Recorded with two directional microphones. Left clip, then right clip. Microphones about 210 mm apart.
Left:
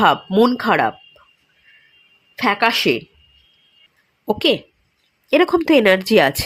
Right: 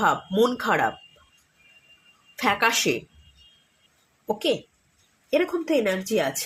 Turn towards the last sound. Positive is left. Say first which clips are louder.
# left 11 dB
turn(degrees=45)  # may be behind; listen again after turning